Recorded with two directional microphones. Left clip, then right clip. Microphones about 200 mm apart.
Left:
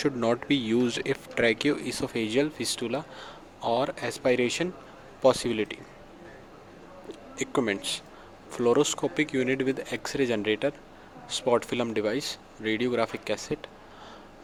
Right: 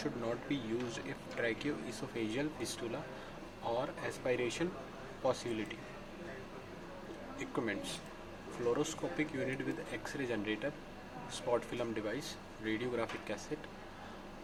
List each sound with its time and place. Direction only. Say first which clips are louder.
0.0 s speech: left 13 dB; 45° left (ahead or behind)
7.3 s speech: left 11 dB; 50° left (ahead or behind)